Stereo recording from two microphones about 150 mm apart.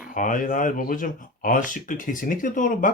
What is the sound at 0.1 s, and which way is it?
Speech, 60° left (ahead or behind).